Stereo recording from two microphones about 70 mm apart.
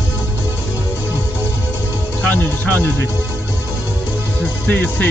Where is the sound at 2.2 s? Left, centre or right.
Left.